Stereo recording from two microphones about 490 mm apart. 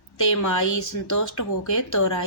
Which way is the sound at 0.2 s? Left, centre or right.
Left.